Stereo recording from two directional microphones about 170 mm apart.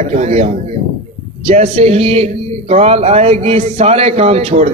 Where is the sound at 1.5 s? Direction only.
40° right (ahead or behind).